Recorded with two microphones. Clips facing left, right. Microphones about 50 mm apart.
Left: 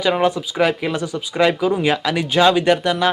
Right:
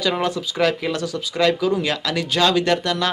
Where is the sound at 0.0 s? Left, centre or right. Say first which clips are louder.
Left 4 dB; centre.